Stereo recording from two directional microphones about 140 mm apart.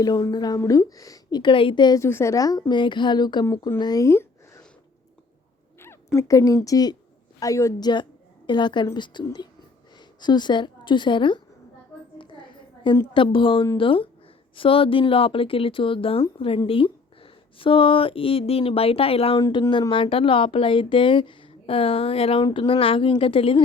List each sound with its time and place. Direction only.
0.0 s a woman's voice: 30° left (ahead or behind)
2.0 s a woman's voice: 20° left (ahead or behind)
3.4 s speech: 20° left (ahead or behind)
5.8 s a sound: 20° left (ahead or behind)
6.7 s a woman's voice: 25° left (ahead or behind)
12.1 s a sound: 35° left (ahead or behind)
13.1 s speech: 35° left (ahead or behind)